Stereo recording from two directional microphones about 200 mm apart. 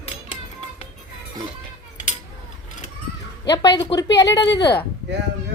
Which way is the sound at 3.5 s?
20° left (ahead or behind).